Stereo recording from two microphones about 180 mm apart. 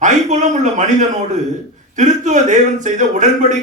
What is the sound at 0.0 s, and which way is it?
A man's voice, 40° right (ahead or behind).